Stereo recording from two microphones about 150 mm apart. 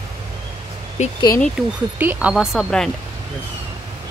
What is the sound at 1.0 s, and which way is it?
Speech, 50° left (ahead or behind).